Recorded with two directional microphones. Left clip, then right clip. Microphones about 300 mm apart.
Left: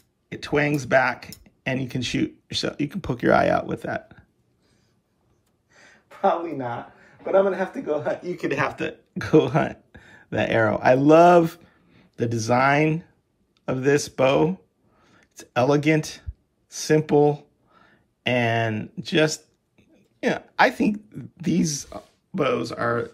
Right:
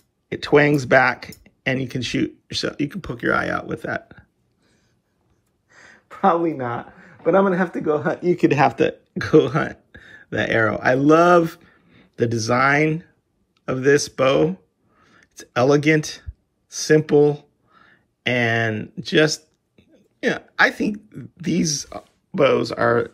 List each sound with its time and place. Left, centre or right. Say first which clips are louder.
0.3 s speech: right 7 dB; centre
6.4 s a man's voice: right 6 dB; right
8.5 s speech: right 8 dB; centre